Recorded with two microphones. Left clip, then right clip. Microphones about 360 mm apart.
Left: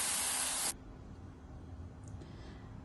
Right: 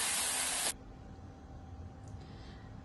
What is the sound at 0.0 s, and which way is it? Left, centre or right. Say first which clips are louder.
Static: right 2 dB; centre.